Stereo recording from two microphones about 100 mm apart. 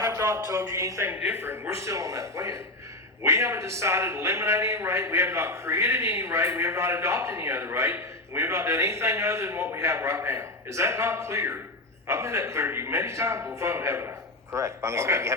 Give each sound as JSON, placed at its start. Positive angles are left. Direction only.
{"t": 0.0, "sound": "speech", "side_deg": -30}
{"t": 1.1, "sound": "a man's voice", "side_deg": -20}